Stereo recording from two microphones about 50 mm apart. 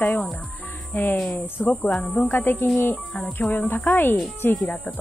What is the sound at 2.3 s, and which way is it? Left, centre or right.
Speech, left.